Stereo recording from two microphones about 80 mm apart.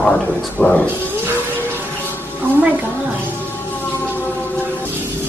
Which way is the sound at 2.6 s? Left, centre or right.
Right.